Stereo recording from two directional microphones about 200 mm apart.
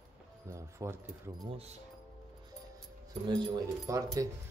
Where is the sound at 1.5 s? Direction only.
30° right (ahead or behind).